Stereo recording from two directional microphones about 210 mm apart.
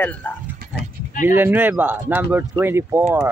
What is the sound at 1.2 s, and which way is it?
Speech, 10° right (ahead or behind).